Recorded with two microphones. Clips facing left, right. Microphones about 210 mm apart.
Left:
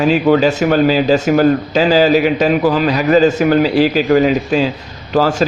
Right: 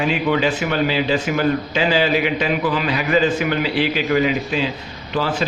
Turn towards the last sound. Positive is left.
turn(degrees=45)  # may be behind; listen again after turning